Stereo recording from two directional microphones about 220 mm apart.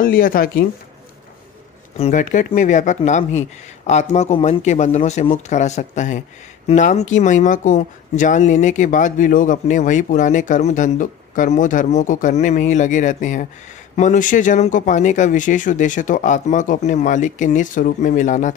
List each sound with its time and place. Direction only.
0.0 s speech: 40° left (ahead or behind)
2.0 s speech: 35° left (ahead or behind)